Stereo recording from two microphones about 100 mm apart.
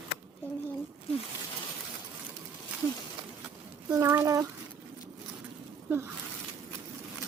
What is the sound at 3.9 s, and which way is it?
Speech, 25° right (ahead or behind).